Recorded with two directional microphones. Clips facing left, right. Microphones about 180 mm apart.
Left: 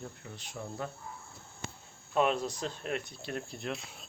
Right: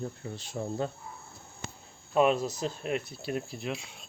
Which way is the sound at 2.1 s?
5° right (ahead or behind).